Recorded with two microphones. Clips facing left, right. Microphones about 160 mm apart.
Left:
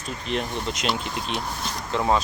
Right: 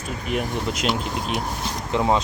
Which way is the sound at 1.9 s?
20° right (ahead or behind).